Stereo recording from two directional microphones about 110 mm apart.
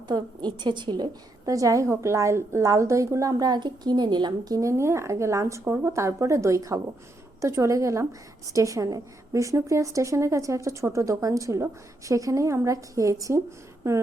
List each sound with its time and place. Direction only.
0.1 s a woman's voice: 40° right (ahead or behind)